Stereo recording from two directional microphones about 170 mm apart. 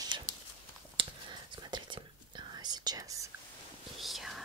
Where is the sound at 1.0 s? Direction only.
30° right (ahead or behind).